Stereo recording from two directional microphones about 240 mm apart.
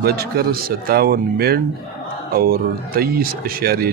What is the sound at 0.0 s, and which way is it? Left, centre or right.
Speech, right.